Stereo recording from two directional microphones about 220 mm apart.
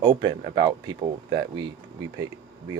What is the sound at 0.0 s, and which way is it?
Speech, 20° right (ahead or behind).